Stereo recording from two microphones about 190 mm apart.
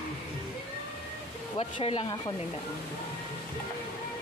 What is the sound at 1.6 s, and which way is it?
Speech, 30° left (ahead or behind).